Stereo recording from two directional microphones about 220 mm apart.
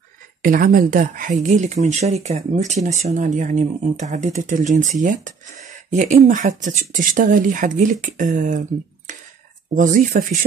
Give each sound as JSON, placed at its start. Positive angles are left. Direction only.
{"t": 0.4, "sound": "speech", "side_deg": -40}